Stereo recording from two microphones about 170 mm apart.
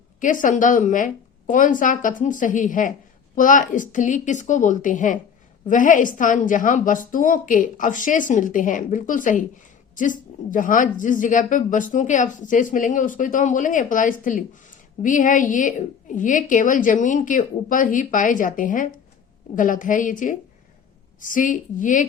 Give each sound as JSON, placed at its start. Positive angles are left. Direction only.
{"t": 0.2, "sound": "a woman's voice", "side_deg": 50}